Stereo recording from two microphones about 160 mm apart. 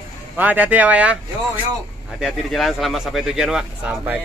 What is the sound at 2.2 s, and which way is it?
Speech, centre (ahead or behind).